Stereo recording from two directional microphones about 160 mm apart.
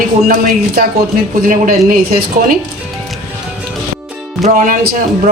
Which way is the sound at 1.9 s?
65° right (ahead or behind).